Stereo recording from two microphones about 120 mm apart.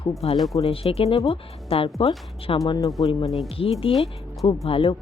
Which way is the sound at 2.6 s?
30° left (ahead or behind).